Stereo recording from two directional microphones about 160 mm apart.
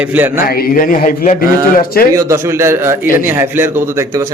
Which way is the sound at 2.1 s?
15° right (ahead or behind).